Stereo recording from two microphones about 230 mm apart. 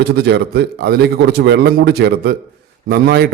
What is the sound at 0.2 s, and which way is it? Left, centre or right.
A man's voice, right.